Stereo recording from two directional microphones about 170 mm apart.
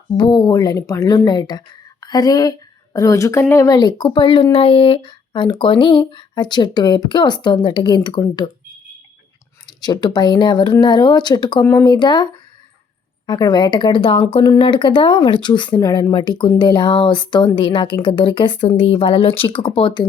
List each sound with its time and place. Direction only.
0.2 s speech: 25° left (ahead or behind)
9.6 s speech: 25° left (ahead or behind)